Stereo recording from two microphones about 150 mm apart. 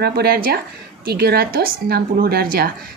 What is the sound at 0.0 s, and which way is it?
A woman's voice, 90° right.